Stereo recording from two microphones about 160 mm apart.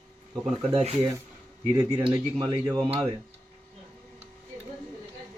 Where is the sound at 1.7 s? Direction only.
25° right (ahead or behind).